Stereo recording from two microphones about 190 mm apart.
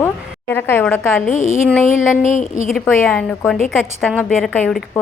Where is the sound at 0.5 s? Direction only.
10° left (ahead or behind).